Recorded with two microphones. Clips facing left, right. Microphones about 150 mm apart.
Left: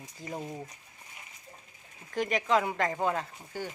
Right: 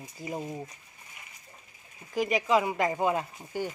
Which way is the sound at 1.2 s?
30° left (ahead or behind).